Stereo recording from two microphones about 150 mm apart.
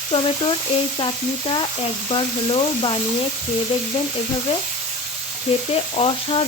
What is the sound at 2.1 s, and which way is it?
Frying, 35° left (ahead or behind).